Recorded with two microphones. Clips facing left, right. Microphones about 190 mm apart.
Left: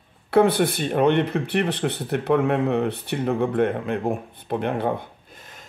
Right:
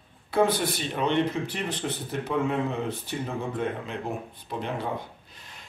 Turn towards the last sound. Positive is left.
turn(degrees=55)  # may be behind; listen again after turning